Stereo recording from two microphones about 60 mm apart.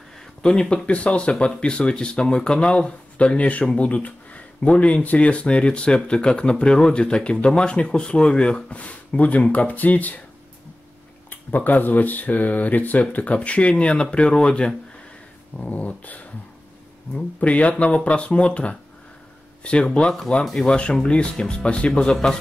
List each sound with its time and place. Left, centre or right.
0.4 s speech: centre
11.2 s speech: left
17.4 s speech: left